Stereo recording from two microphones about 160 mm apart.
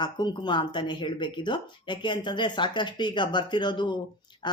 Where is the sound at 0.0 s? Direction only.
30° left (ahead or behind).